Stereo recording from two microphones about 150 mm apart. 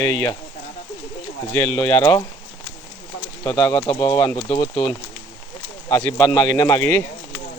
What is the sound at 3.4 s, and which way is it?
Speech, 25° left (ahead or behind).